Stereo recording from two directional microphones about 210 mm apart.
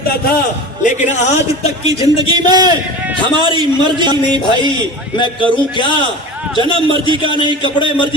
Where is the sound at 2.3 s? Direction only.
20° right (ahead or behind).